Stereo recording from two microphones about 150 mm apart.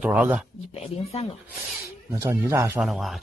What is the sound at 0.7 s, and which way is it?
Speech, 45° left (ahead or behind).